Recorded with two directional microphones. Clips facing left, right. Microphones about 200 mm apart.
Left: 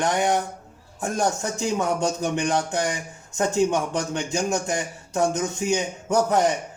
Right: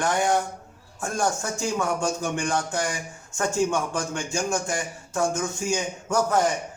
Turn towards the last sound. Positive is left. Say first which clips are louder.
# left 2 dB
turn(degrees=20)  # may be behind; listen again after turning